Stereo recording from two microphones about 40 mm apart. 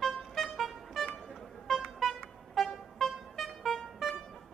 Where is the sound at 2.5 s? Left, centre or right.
Centre.